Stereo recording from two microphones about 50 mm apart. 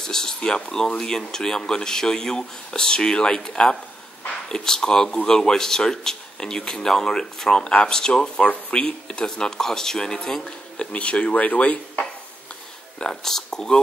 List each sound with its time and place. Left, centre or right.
0.0 s speech: centre
10.8 s speech: left
13.0 s speech: centre